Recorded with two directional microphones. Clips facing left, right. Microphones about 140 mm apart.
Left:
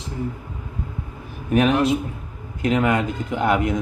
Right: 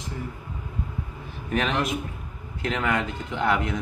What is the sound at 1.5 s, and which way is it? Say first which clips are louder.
Speech: left 8 dB; 10° left (ahead or behind).